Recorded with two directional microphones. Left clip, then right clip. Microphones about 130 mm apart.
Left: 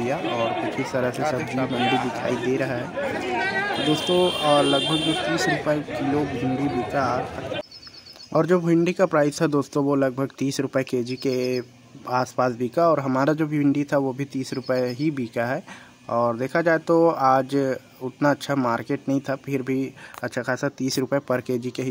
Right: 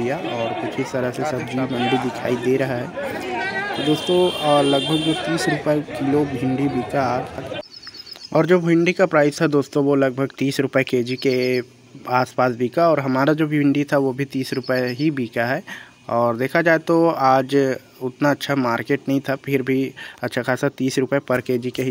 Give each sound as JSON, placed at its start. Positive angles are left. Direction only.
{"t": 0.0, "sound": "speech", "side_deg": 0}
{"t": 2.5, "sound": "speech", "side_deg": -25}
{"t": 2.8, "sound": "speech", "side_deg": 0}